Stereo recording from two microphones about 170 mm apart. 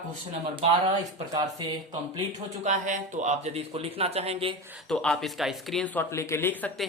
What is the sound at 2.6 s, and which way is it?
Speech, 45° right (ahead or behind).